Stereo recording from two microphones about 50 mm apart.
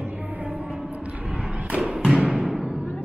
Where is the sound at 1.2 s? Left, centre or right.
Centre.